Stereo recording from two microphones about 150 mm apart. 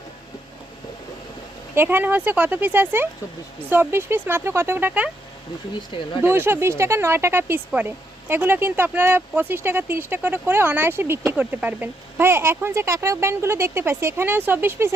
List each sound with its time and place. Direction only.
1.7 s speech: 15° right (ahead or behind)
6.2 s speech: 15° right (ahead or behind)